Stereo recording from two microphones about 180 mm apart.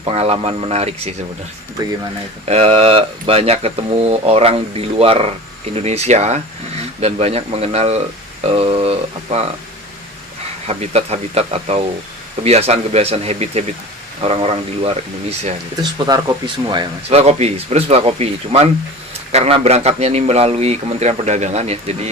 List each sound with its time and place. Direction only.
0.0 s speech: 35° right (ahead or behind)
2.5 s speech: 35° right (ahead or behind)
10.7 s speech: 35° right (ahead or behind)
15.8 s speech: 20° right (ahead or behind); by 22.1 s 35° right (ahead or behind)